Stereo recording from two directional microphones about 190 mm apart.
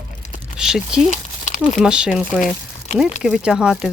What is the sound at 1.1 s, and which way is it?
Crumpling, 40° left (ahead or behind).